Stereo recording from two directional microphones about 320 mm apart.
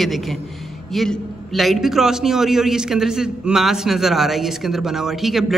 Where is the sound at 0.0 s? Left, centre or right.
Centre.